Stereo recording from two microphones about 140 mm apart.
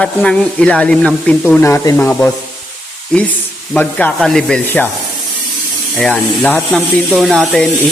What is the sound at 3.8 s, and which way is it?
Speech, 10° left (ahead or behind).